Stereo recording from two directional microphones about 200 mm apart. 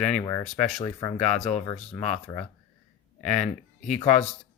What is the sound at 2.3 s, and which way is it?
Speech, 20° left (ahead or behind).